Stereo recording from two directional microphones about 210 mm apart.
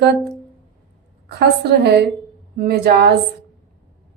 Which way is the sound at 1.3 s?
50° right (ahead or behind).